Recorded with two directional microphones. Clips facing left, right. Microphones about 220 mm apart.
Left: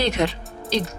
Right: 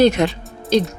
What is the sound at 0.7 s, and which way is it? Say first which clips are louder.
Speech: right 8 dB; 45° right (ahead or behind).